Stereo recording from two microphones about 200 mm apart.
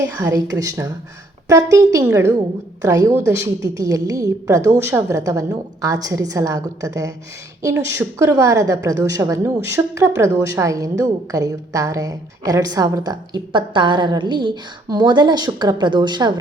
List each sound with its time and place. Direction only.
0.0 s a woman's voice: 20° right (ahead or behind)